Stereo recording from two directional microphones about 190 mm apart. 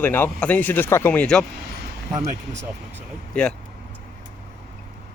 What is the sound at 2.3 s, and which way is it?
Speech, 35° right (ahead or behind).